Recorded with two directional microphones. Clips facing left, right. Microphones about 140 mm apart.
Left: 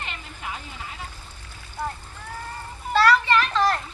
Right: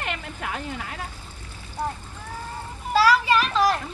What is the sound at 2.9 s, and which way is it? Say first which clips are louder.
Children playing: even; 10° right (ahead or behind).